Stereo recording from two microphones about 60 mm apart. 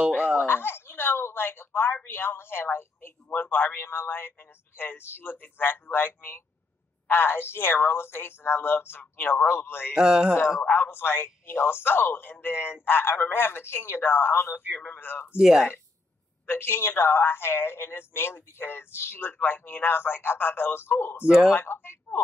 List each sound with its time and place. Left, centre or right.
0.4 s a sound: left
2.0 s a woman's voice: left
9.9 s speech: centre
10.7 s a woman's voice: left
15.3 s speech: centre
16.4 s a woman's voice: left
21.3 s speech: centre
21.5 s a woman's voice: left